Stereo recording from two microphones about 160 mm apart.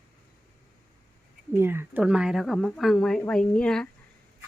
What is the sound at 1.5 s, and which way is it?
A woman's voice, 15° right (ahead or behind).